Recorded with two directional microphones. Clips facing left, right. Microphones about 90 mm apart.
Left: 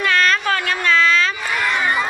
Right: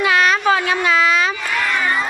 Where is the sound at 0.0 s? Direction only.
10° right (ahead or behind).